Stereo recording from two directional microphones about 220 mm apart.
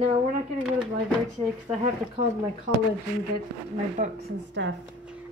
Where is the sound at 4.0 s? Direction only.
35° right (ahead or behind).